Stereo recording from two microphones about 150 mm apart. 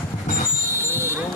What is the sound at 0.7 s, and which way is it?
Vehicle, 15° right (ahead or behind).